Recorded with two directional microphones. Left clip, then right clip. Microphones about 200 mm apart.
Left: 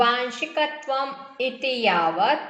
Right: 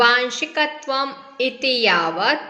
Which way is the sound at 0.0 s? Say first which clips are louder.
Right 5 dB; 25° right (ahead or behind).